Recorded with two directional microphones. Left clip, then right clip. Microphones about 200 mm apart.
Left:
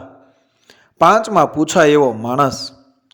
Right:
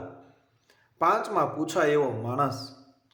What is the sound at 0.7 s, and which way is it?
A man's voice, 45° left (ahead or behind).